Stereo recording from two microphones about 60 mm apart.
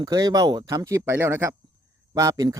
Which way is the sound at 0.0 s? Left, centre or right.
Right.